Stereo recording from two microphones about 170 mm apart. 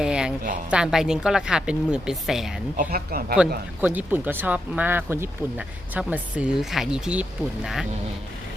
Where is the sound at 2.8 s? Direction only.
60° right (ahead or behind).